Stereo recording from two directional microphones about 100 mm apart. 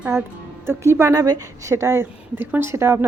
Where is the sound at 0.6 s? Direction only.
25° right (ahead or behind).